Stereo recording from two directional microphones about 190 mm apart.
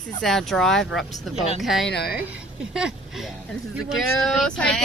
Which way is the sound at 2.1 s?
5° right (ahead or behind).